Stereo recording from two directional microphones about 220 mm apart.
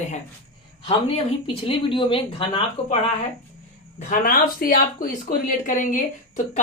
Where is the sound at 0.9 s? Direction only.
25° left (ahead or behind).